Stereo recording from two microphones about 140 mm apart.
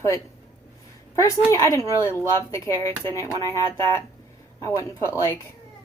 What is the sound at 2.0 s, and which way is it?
Speech, 20° left (ahead or behind).